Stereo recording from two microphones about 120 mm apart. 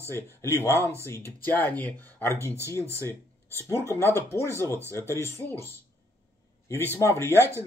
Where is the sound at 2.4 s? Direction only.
25° right (ahead or behind).